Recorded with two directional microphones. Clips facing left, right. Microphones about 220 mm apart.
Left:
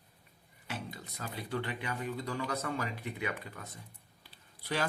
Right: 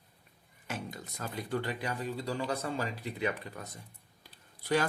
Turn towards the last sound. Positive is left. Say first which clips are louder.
# right 6 dB
turn(degrees=-45)  # may be behind; listen again after turning